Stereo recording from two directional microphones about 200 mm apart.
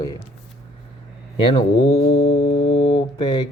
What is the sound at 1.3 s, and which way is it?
Speech, 25° left (ahead or behind).